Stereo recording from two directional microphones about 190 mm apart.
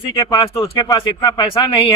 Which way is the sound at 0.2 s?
20° left (ahead or behind).